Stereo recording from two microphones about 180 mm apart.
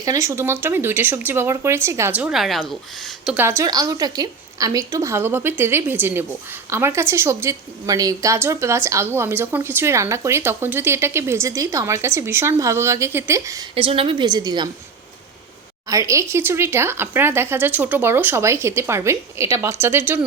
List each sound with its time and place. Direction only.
0.0 s a woman's voice: 20° right (ahead or behind); by 3.3 s centre (ahead or behind)
3.3 s a woman's voice: 15° right (ahead or behind)
13.7 s a woman's voice: 30° right (ahead or behind)
15.9 s a woman's voice: 15° right (ahead or behind)